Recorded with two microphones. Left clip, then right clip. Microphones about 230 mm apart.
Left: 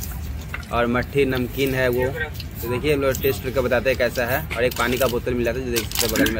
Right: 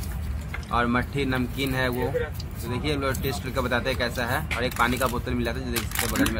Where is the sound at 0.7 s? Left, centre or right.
Centre.